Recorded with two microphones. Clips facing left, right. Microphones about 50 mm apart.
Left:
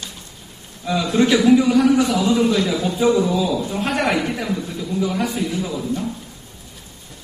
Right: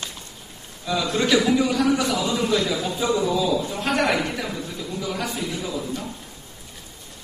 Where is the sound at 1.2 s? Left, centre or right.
Left.